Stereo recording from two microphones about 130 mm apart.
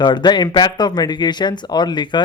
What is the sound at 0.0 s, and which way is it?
Speech, 35° left (ahead or behind).